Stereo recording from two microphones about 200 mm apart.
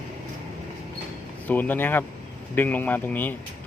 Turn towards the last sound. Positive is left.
turn(degrees=10)  # may be behind; listen again after turning